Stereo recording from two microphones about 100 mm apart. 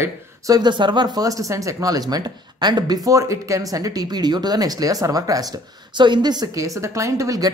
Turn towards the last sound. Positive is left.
turn(degrees=-35)  # may be behind; listen again after turning